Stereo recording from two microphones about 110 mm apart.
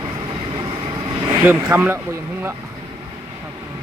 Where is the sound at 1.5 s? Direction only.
20° right (ahead or behind).